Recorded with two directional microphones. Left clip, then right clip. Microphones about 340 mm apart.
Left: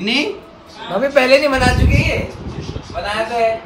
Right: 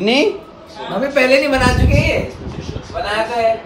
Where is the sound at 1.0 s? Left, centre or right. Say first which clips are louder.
Left 2 dB; centre.